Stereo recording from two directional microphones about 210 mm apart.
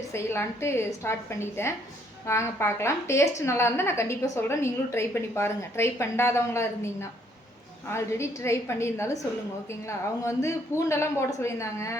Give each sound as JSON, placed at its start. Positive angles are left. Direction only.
{"t": 0.1, "sound": "a woman's voice", "side_deg": 10}